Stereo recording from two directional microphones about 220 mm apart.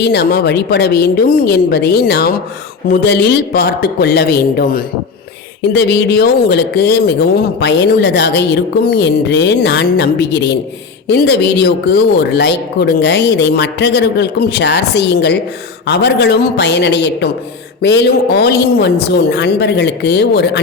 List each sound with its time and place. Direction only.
0.0 s speech: 50° left (ahead or behind)